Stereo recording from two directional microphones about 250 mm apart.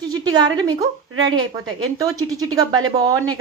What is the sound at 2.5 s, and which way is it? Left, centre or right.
Speech, centre.